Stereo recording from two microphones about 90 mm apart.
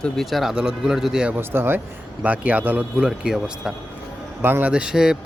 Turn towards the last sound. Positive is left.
turn(degrees=-5)  # may be behind; listen again after turning